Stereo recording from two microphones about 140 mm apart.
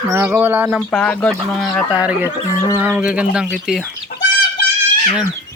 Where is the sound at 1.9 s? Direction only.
10° right (ahead or behind).